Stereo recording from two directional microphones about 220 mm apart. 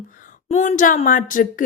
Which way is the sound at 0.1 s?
35° left (ahead or behind).